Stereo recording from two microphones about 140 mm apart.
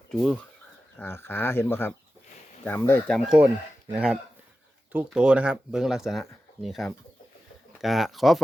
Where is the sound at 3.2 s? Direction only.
Centre (ahead or behind).